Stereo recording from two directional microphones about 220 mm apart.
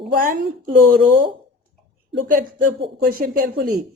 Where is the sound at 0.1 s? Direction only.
40° right (ahead or behind).